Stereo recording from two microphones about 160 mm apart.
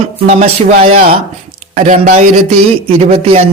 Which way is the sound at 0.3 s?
40° right (ahead or behind).